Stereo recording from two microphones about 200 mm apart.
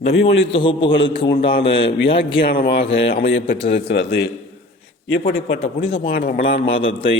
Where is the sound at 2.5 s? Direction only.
50° left (ahead or behind).